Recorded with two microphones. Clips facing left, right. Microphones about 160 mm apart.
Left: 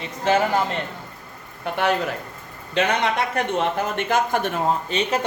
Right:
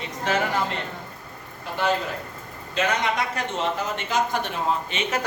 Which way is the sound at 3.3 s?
55° left (ahead or behind).